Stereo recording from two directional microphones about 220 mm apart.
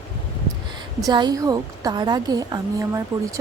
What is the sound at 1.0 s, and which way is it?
A woman's voice, 20° right (ahead or behind).